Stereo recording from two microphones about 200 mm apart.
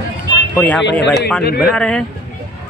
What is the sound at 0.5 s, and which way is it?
Speech, 5° left (ahead or behind).